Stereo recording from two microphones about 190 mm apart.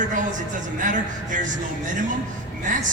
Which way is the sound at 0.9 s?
45° right (ahead or behind).